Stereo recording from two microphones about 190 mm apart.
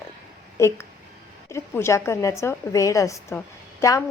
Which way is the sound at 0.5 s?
15° left (ahead or behind).